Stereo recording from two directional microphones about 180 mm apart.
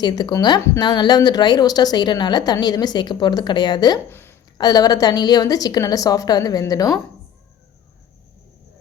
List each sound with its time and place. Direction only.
0.0 s speech: 25° left (ahead or behind)